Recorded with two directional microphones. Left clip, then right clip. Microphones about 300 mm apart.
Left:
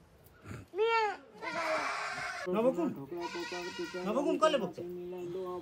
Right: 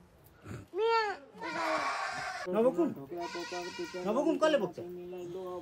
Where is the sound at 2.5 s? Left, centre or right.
Right.